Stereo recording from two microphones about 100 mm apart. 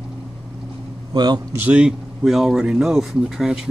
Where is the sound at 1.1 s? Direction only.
45° right (ahead or behind).